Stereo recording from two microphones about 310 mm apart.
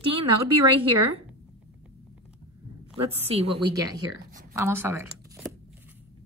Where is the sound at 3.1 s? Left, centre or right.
Centre.